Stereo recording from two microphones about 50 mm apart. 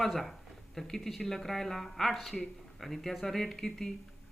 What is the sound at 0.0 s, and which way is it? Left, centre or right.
A woman's voice, centre.